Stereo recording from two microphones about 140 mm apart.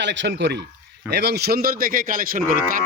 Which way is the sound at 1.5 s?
90° right.